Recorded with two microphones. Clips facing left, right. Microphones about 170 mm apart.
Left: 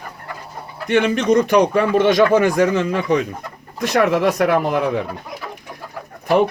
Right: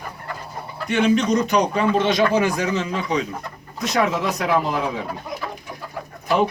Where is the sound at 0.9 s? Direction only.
60° left (ahead or behind).